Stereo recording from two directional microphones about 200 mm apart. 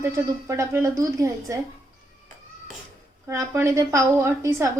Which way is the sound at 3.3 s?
15° right (ahead or behind).